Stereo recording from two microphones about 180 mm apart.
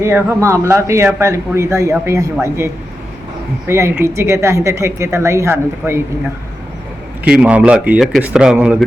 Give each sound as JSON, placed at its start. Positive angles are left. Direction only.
{"t": 0.0, "sound": "a man's voice", "side_deg": -10}
{"t": 3.7, "sound": "a man's voice", "side_deg": -15}
{"t": 7.3, "sound": "a man's voice", "side_deg": -5}